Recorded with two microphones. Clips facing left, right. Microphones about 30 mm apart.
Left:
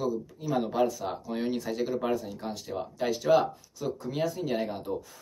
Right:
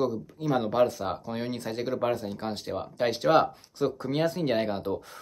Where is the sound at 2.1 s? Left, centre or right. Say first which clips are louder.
Right 1 dB; right.